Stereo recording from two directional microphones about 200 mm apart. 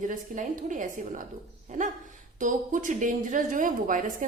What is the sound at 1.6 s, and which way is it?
Dog, 40° right (ahead or behind).